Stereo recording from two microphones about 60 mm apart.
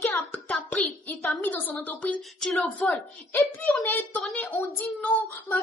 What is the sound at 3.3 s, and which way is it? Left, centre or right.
Speech, left.